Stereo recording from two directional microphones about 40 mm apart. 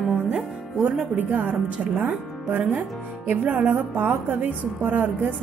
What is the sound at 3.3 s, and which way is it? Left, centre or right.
Speech, right.